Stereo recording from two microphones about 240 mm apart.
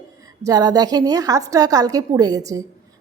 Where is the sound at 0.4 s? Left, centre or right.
Centre.